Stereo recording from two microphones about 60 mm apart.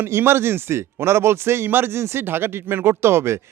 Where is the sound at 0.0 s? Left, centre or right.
Right.